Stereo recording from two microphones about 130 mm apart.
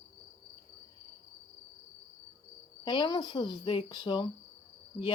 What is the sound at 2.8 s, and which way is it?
Speech, 35° left (ahead or behind).